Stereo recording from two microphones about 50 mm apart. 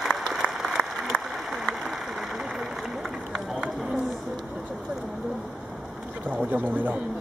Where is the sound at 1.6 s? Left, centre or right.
Centre.